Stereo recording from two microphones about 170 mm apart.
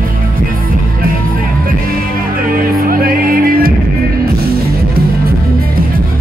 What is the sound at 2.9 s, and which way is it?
Music, 60° right (ahead or behind).